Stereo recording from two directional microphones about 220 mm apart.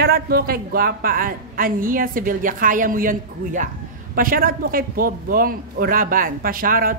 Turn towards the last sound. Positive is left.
turn(degrees=-40)  # may be behind; listen again after turning